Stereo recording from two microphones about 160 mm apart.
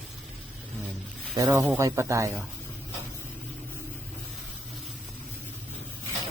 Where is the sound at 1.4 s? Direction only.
15° right (ahead or behind).